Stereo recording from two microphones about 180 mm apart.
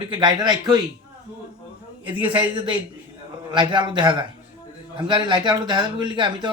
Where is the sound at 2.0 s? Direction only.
30° right (ahead or behind).